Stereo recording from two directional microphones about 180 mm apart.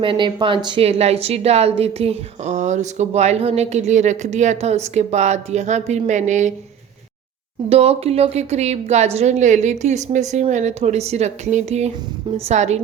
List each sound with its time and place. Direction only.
0.0 s a woman's voice: 25° right (ahead or behind)
7.7 s a woman's voice: 35° right (ahead or behind)